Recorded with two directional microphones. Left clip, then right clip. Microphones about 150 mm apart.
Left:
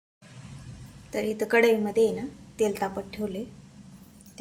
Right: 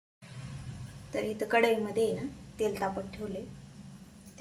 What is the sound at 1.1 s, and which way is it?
Speech, 50° left (ahead or behind).